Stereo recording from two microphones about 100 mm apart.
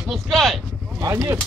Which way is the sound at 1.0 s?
30° right (ahead or behind).